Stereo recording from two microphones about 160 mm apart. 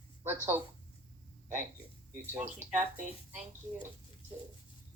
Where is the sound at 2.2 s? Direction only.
15° right (ahead or behind).